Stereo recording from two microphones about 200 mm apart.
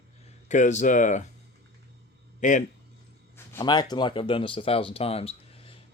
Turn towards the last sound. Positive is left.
turn(degrees=30)  # may be behind; listen again after turning